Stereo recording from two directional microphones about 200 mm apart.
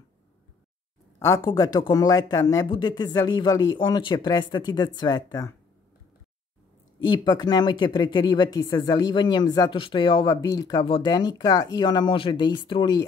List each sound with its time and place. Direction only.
1.2 s speech: 15° left (ahead or behind)
7.0 s speech: 20° left (ahead or behind)